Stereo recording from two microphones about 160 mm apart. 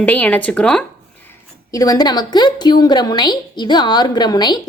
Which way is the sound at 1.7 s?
20° left (ahead or behind).